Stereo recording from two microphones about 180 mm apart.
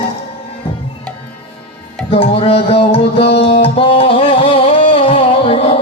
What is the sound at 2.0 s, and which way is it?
Music, 30° left (ahead or behind).